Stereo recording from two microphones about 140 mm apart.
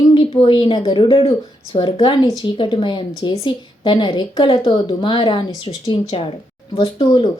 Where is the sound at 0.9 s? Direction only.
40° left (ahead or behind).